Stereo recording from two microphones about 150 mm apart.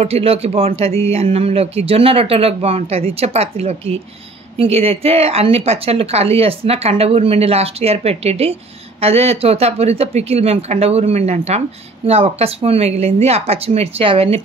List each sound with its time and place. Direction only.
0.0 s speech: 40° right (ahead or behind)